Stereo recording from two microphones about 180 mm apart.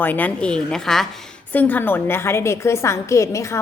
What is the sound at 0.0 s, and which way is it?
A woman's voice, 10° left (ahead or behind).